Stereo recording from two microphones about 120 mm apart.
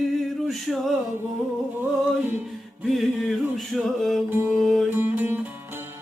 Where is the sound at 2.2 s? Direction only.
15° right (ahead or behind).